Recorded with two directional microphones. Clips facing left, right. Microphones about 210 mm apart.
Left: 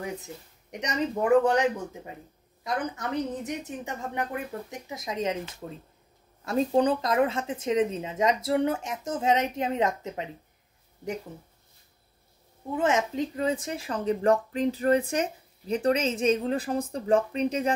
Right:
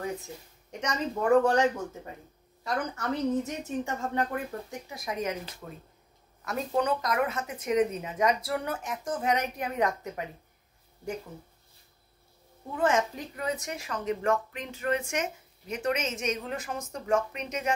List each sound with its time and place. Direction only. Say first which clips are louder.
0.0 s speech: even; 20° left (ahead or behind)
12.7 s speech: left 1 dB; 20° left (ahead or behind)